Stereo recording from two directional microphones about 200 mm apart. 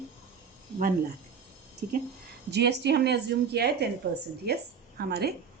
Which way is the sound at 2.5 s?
55° right (ahead or behind).